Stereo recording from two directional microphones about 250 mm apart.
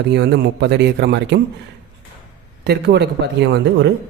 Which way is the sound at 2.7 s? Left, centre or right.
Right.